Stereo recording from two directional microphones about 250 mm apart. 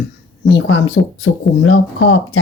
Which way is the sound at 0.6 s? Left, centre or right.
Left.